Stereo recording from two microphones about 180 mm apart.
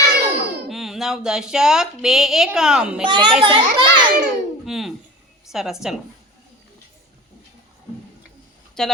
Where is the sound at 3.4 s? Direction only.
25° right (ahead or behind).